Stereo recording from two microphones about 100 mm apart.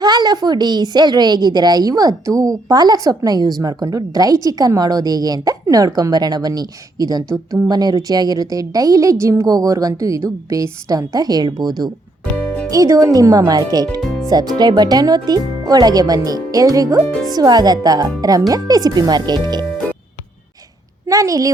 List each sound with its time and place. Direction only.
0.0 s a woman's voice: 45° right (ahead or behind)
12.7 s a woman's voice: 35° right (ahead or behind)
14.0 s music: centre (ahead or behind)
14.3 s a woman's voice: 45° right (ahead or behind)
21.1 s a woman's voice: 35° right (ahead or behind)